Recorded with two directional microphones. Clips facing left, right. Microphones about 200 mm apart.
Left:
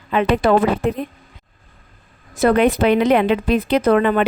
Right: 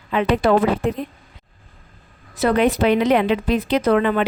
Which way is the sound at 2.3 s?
55° left (ahead or behind).